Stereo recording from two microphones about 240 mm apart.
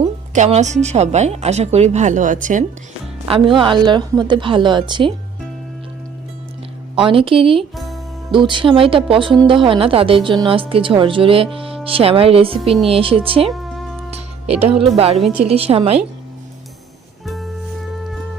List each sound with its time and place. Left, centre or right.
0.0 s a woman's voice: right
3.2 s a woman's voice: right
6.9 s a woman's voice: right
7.8 s music: centre
8.3 s a woman's voice: centre
13.5 s music: centre
15.1 s a woman's voice: centre
15.4 s a woman's voice: right
17.2 s music: centre